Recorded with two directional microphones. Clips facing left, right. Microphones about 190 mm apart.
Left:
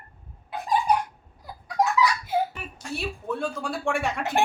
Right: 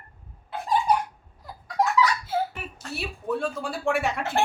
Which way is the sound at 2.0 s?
15° left (ahead or behind).